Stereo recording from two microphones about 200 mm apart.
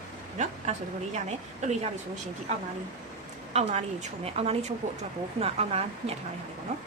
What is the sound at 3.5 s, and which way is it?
A woman's voice, 35° right (ahead or behind).